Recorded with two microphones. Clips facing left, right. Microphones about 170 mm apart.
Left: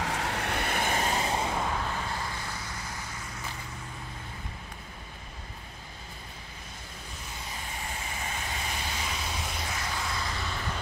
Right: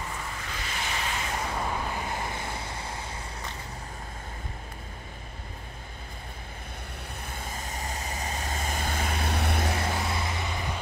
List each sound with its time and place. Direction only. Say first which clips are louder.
0.0 s vehicle: left 6 dB; 80° left; by 1.5 s 30° left (ahead or behind)
1.7 s vehicle: right 1 dB; 15° right (ahead or behind)
7.2 s vehicle: right 3 dB; 55° right (ahead or behind)
9.8 s vehicle: right 4 dB; 25° right (ahead or behind)